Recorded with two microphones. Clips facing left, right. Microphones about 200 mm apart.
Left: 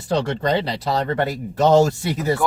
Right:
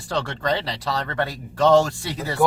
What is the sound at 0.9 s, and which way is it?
Speech, 40° left (ahead or behind).